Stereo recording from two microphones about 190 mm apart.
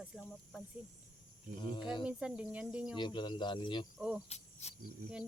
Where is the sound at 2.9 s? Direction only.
25° left (ahead or behind).